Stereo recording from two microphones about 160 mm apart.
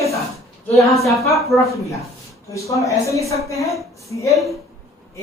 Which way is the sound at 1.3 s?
Centre (ahead or behind).